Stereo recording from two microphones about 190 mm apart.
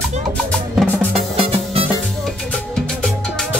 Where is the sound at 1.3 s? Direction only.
30° right (ahead or behind).